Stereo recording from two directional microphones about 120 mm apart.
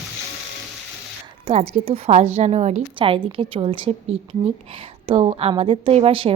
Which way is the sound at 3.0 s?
50° right (ahead or behind).